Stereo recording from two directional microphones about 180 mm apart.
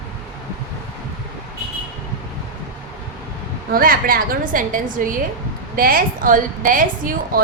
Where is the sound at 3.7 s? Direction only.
50° right (ahead or behind).